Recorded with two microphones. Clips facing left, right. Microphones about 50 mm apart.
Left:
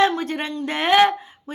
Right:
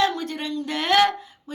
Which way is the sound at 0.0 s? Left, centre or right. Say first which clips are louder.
Left 4 dB; left.